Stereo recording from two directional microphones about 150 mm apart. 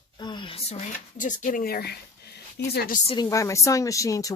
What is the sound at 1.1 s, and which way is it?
Speech, 60° left (ahead or behind).